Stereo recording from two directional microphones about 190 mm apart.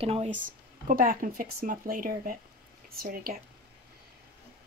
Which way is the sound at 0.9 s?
45° right (ahead or behind).